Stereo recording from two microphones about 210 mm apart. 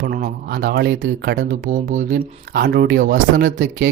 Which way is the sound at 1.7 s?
35° right (ahead or behind).